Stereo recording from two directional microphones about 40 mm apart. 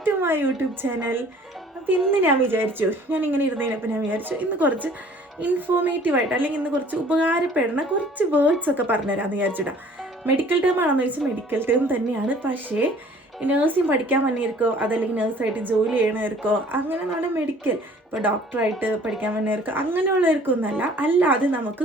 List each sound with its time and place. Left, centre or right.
0.0 s a woman's voice: right
7.1 s a woman's voice: right
11.5 s a woman's voice: right
18.8 s a woman's voice: right